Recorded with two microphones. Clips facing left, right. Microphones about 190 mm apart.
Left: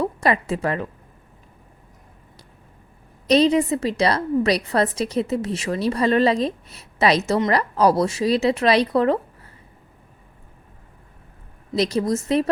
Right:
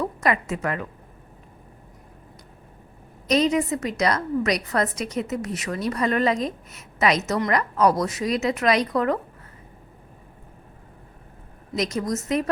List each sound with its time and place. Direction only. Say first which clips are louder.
0.0 s a woman's voice: left 3 dB; 30° left (ahead or behind)
3.2 s a woman's voice: left 4 dB; 30° left (ahead or behind)
11.7 s a woman's voice: left 5 dB; 30° left (ahead or behind)